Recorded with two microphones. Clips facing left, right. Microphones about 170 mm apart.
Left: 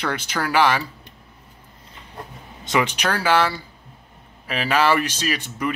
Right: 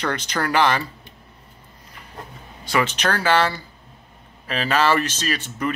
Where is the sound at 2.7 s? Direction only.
15° left (ahead or behind).